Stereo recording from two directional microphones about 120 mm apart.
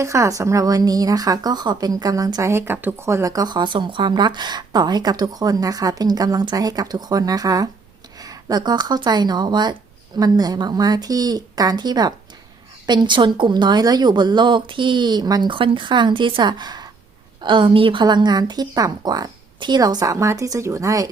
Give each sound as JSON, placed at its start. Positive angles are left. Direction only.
{"t": 0.0, "sound": "speech", "side_deg": -25}